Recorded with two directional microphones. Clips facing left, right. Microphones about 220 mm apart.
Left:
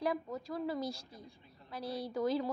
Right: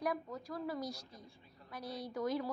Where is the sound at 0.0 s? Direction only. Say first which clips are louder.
Left 3 dB; 25° left (ahead or behind).